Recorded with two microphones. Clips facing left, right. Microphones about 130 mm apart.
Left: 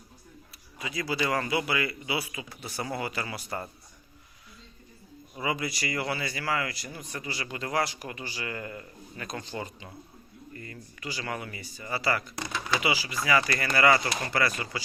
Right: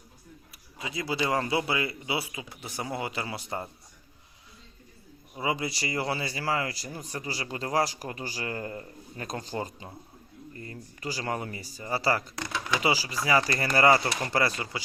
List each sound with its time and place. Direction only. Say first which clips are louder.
0.8 s speech: even; 25° right (ahead or behind)
5.3 s speech: right 1 dB; 25° right (ahead or behind)